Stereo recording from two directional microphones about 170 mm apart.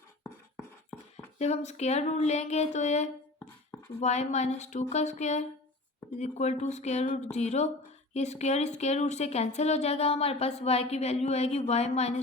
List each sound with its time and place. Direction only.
1.1 s speech: 40° left (ahead or behind)